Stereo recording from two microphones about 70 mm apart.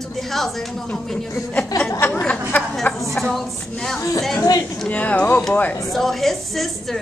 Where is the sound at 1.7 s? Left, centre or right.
Left.